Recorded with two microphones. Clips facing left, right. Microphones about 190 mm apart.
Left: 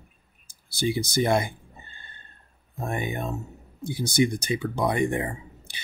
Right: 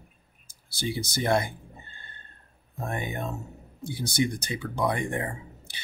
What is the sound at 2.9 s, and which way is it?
Speech, 15° left (ahead or behind).